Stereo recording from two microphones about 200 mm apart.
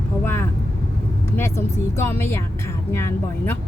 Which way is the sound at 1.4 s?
10° left (ahead or behind).